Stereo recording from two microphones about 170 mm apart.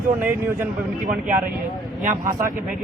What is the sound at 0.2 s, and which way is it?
Speech, 15° right (ahead or behind).